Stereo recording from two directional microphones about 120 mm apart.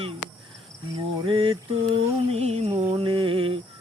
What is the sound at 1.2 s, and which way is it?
Mantra, 45° right (ahead or behind).